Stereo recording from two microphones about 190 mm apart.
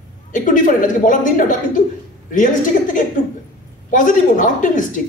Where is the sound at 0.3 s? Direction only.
45° left (ahead or behind).